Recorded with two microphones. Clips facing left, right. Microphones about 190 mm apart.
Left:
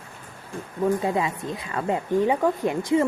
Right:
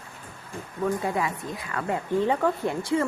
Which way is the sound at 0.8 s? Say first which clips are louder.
Left 3 dB; 20° left (ahead or behind).